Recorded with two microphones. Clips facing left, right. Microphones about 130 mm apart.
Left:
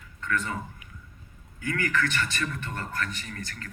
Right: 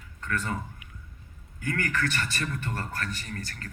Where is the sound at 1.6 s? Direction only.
45° right (ahead or behind).